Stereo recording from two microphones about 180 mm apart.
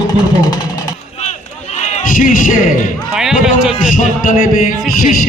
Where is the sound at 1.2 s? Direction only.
40° left (ahead or behind).